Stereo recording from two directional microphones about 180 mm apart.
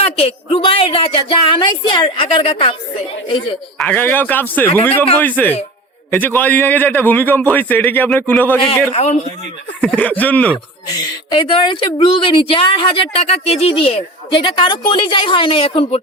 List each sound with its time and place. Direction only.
0.0 s speech: 30° left (ahead or behind)
3.8 s a man's voice: 10° left (ahead or behind)
8.9 s a man's voice: 40° left (ahead or behind)
9.8 s a man's voice: 10° left (ahead or behind)
10.8 s speech: 25° left (ahead or behind)